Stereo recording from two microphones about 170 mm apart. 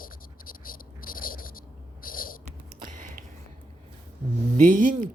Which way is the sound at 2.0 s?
55° left (ahead or behind).